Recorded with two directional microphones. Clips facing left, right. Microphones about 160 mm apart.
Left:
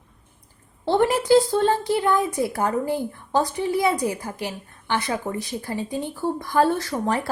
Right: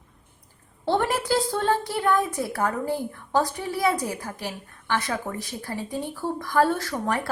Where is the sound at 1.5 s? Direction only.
15° left (ahead or behind).